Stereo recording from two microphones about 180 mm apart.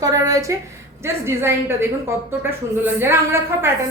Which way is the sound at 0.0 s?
20° right (ahead or behind).